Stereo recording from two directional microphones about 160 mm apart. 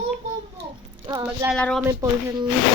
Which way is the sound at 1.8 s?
20° right (ahead or behind).